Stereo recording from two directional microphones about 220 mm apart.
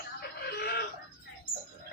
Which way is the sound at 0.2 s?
45° left (ahead or behind).